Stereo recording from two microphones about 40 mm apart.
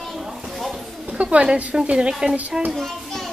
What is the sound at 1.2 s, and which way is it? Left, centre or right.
Speech, right.